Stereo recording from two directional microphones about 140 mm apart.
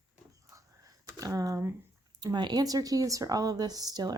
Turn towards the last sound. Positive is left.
turn(degrees=-25)  # may be behind; listen again after turning